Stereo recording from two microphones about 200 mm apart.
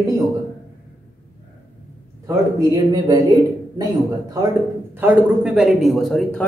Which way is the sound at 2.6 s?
20° right (ahead or behind).